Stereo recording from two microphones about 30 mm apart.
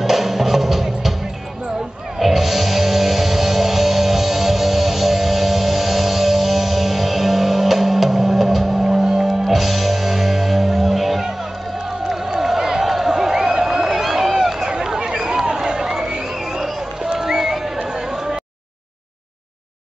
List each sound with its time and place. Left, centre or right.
0.0 s music: centre
2.1 s music: centre
12.1 s crowd: centre
12.8 s a sound: centre
15.4 s crowd: right
17.1 s a sound: centre